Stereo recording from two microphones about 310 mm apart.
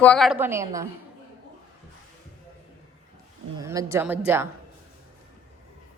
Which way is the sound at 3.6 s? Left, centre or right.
Centre.